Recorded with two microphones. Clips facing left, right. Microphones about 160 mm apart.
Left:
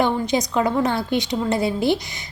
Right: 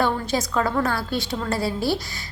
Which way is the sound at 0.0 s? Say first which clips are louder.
Left 3 dB; 20° left (ahead or behind).